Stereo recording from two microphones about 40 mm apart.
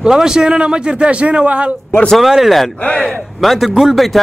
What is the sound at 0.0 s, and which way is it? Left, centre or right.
A man's voice, centre.